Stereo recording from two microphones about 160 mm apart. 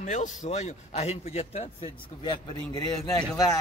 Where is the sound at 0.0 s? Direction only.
50° left (ahead or behind).